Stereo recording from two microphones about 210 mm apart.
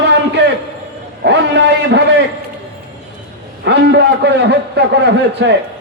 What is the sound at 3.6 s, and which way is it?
A man's voice, 55° right (ahead or behind).